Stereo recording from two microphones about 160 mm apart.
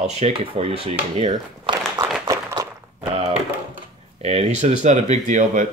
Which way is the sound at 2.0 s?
20° right (ahead or behind).